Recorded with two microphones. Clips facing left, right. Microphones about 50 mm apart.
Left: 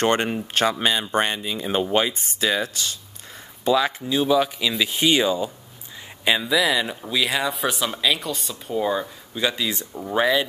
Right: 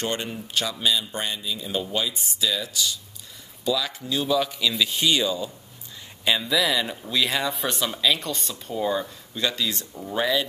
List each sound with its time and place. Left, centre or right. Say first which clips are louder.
0.0 s speech: left 8 dB; left
4.1 s speech: left 3 dB; centre